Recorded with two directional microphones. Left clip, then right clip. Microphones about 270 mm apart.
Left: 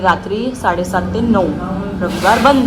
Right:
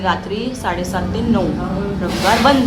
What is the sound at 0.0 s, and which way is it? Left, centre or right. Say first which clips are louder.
A woman's voice: left 5 dB; centre.